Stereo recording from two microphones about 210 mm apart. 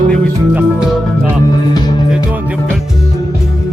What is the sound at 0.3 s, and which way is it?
Music, 5° right (ahead or behind).